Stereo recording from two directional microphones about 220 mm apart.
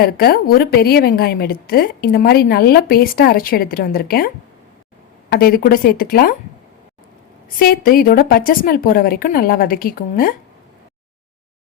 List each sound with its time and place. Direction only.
0.0 s a woman's voice: 45° left (ahead or behind)
5.3 s a woman's voice: 45° left (ahead or behind)
7.6 s a woman's voice: 40° left (ahead or behind)